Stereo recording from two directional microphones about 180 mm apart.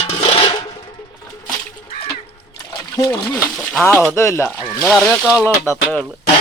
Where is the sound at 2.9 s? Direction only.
15° left (ahead or behind); by 5.5 s 5° right (ahead or behind).